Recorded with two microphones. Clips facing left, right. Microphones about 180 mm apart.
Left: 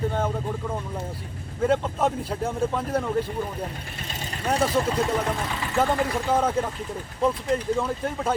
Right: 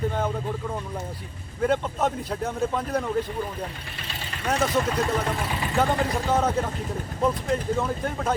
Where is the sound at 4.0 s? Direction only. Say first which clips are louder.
Left 2 dB; 45° left (ahead or behind).